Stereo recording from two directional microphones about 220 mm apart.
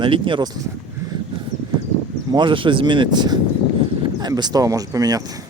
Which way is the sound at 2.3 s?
20° right (ahead or behind).